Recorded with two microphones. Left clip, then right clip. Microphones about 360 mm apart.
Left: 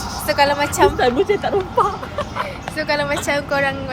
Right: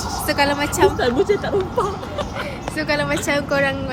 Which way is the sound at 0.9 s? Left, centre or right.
Centre.